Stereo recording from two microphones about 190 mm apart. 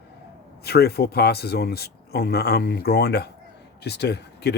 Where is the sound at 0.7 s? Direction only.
55° left (ahead or behind).